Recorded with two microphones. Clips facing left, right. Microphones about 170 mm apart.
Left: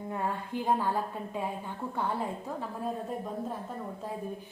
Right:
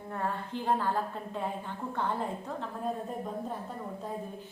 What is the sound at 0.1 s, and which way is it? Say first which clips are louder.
A woman's voice: even; 15° left (ahead or behind).